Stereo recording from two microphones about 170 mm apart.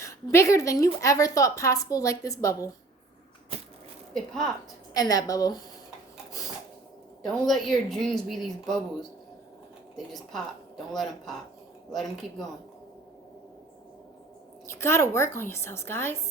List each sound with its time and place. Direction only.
0.0 s a woman's voice: 15° left (ahead or behind)
4.9 s a woman's voice: 20° left (ahead or behind)
7.3 s a woman's voice: centre (ahead or behind)
11.9 s a woman's voice: centre (ahead or behind)
14.7 s a woman's voice: 15° left (ahead or behind)